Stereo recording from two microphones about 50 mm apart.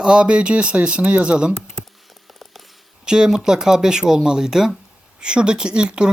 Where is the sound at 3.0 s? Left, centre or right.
Centre.